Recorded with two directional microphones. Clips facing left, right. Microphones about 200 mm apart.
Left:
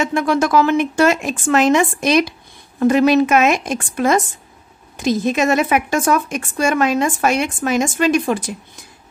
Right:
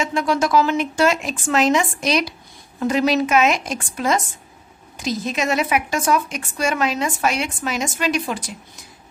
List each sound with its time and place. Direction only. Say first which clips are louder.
0.0 s a woman's voice: left 3 dB; 55° left (ahead or behind)